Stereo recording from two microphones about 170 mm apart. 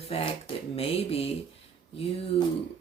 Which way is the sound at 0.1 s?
35° left (ahead or behind).